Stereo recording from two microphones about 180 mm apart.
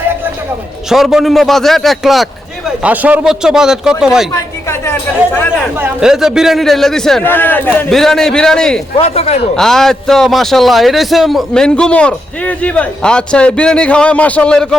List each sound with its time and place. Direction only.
0.9 s a man's voice: centre (ahead or behind)
4.4 s speech: 15° left (ahead or behind)
5.8 s a man's voice: 5° right (ahead or behind)
9.0 s speech: 35° left (ahead or behind)
9.6 s a man's voice: centre (ahead or behind)